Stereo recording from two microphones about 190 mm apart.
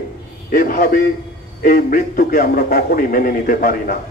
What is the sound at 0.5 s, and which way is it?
A man's voice, 50° left (ahead or behind).